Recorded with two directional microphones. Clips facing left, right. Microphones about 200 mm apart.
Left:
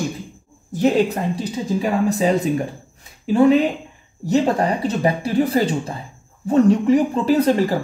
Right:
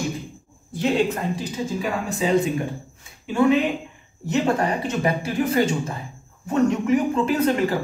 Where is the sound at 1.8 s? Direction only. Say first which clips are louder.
Left 7 dB; 40° left (ahead or behind).